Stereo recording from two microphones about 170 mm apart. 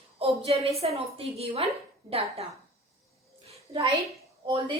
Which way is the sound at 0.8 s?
35° right (ahead or behind).